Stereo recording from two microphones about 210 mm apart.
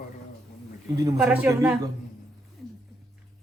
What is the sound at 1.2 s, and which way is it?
Speech, 10° right (ahead or behind).